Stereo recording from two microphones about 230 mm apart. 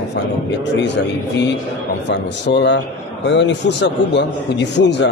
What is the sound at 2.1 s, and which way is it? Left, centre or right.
A man's voice, left.